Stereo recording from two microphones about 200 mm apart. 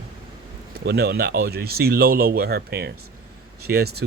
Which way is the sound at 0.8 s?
55° right (ahead or behind).